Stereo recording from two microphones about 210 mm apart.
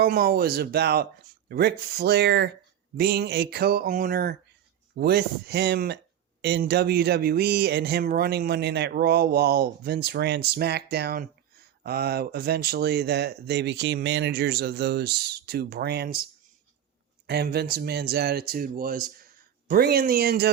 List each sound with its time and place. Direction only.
0.0 s speech: 45° right (ahead or behind)
17.2 s speech: 50° right (ahead or behind)